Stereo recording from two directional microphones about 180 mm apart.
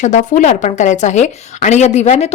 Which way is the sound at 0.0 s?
45° left (ahead or behind).